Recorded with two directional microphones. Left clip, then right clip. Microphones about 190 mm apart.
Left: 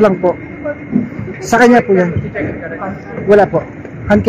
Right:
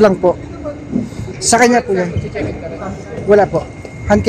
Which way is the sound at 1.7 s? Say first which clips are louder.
Left 4 dB; centre (ahead or behind).